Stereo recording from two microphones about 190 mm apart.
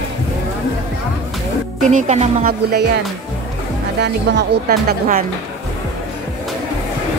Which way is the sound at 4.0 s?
60° right (ahead or behind).